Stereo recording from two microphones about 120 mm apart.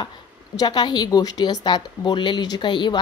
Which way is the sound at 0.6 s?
35° left (ahead or behind).